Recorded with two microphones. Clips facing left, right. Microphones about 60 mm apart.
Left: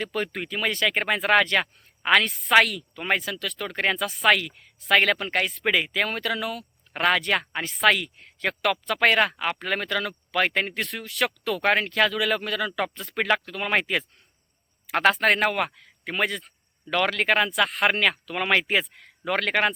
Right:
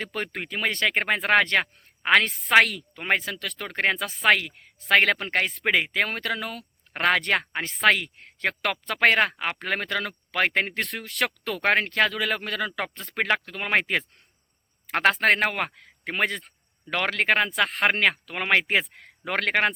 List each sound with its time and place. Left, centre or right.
0.0 s speech: right